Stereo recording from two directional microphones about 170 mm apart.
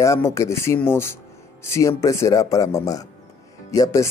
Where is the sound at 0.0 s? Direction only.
15° left (ahead or behind).